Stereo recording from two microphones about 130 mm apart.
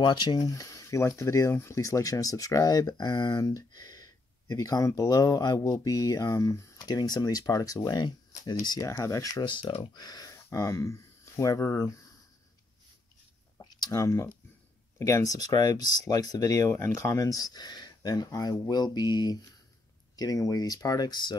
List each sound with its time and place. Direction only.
0.0 s speech: 35° left (ahead or behind)
13.6 s speech: 30° left (ahead or behind)